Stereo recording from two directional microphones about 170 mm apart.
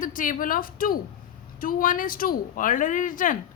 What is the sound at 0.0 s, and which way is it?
A woman's voice, 50° left (ahead or behind).